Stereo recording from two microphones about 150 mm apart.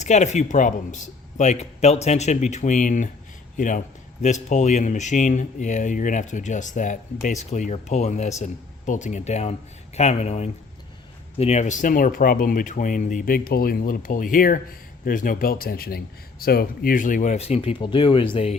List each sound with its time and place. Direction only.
0.0 s speech: 50° left (ahead or behind)
17.3 s speech: 45° left (ahead or behind)